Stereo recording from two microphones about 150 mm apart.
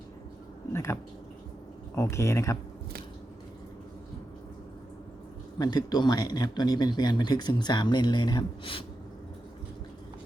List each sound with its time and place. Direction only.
0.7 s speech: 20° left (ahead or behind)
2.0 s speech: 20° left (ahead or behind)
5.5 s speech: 25° left (ahead or behind)